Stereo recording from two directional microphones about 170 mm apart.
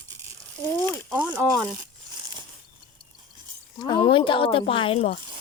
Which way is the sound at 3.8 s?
25° left (ahead or behind).